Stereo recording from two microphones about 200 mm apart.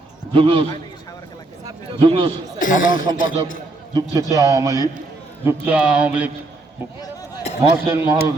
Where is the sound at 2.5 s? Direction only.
40° left (ahead or behind).